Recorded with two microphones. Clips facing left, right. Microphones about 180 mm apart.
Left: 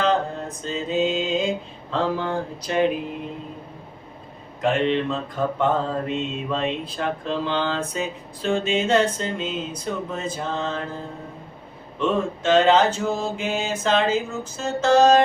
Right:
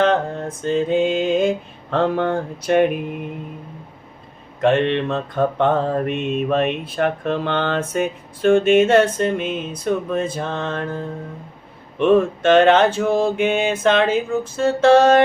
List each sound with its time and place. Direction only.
0.4 s mantra: 55° right (ahead or behind)
4.6 s mantra: 65° right (ahead or behind)
11.9 s mantra: 55° right (ahead or behind)